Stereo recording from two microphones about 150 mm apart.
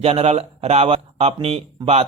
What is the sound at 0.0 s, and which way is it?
Speech, 40° right (ahead or behind).